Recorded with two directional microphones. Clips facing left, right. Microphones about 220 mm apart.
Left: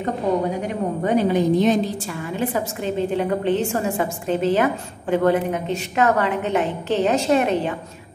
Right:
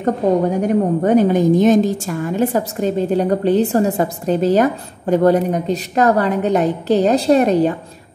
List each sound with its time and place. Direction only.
0.0 s a woman's voice: 45° right (ahead or behind)